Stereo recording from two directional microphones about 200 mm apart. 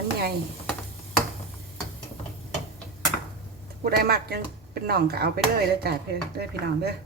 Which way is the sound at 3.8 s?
50° right (ahead or behind).